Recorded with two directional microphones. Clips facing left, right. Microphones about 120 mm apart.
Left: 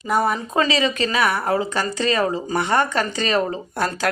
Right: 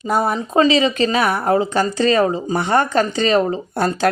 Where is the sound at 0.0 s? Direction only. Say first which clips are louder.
Right 2 dB; 30° right (ahead or behind).